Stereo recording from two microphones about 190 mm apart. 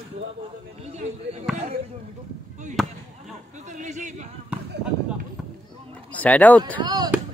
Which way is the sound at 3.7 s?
40° right (ahead or behind).